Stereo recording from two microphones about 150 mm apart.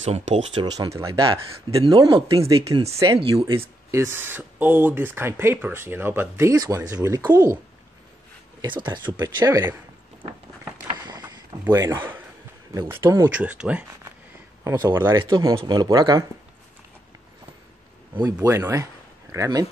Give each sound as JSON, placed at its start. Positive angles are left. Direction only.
{"t": 0.0, "sound": "speech", "side_deg": -45}
{"t": 0.6, "sound": "speech", "side_deg": -20}
{"t": 1.8, "sound": "speech", "side_deg": -35}
{"t": 2.3, "sound": "speech", "side_deg": -25}
{"t": 3.2, "sound": "speech", "side_deg": -35}
{"t": 3.9, "sound": "speech", "side_deg": -15}
{"t": 8.5, "sound": "speech", "side_deg": -30}
{"t": 10.9, "sound": "vehicle", "side_deg": -25}
{"t": 11.6, "sound": "speech", "side_deg": -20}
{"t": 15.1, "sound": "speech", "side_deg": -30}
{"t": 18.2, "sound": "speech", "side_deg": -15}